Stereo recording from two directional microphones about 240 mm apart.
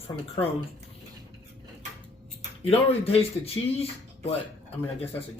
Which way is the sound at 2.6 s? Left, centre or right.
Left.